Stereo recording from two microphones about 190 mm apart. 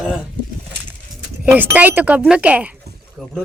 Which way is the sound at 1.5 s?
10° right (ahead or behind).